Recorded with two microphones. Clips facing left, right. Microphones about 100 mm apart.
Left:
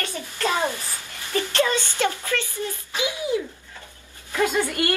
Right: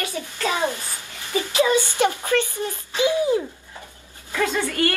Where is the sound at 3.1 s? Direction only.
35° right (ahead or behind).